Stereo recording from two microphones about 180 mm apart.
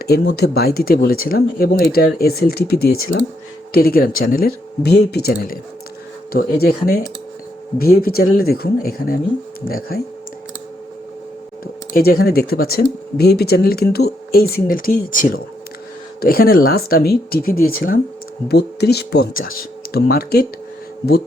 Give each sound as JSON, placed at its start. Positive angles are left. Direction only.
{"t": 0.0, "sound": "speech", "side_deg": 60}
{"t": 11.6, "sound": "speech", "side_deg": 55}
{"t": 18.4, "sound": "speech", "side_deg": 65}